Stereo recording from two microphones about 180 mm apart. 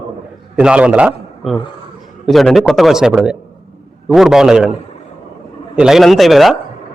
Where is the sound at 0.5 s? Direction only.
5° right (ahead or behind).